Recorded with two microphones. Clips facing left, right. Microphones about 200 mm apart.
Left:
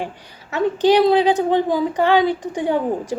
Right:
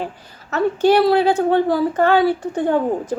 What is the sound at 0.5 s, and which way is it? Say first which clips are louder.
A woman's voice: even; 15° left (ahead or behind).